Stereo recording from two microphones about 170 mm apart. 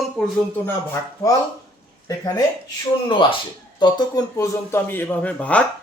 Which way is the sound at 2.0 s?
20° left (ahead or behind).